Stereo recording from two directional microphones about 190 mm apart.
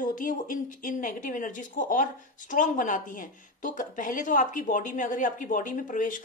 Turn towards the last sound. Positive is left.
turn(degrees=45)  # may be behind; listen again after turning